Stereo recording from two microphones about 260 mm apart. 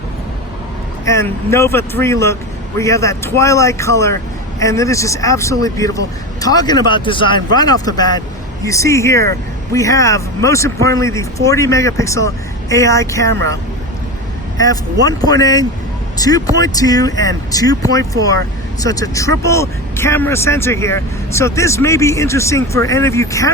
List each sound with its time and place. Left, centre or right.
1.0 s speech: centre
15.0 s speech: centre